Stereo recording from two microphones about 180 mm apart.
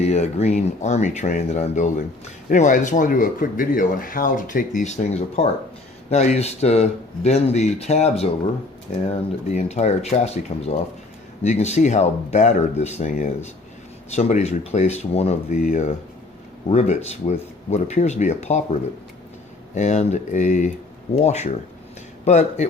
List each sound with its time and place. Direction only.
0.0 s speech: 40° left (ahead or behind)
9.6 s speech: 40° left (ahead or behind)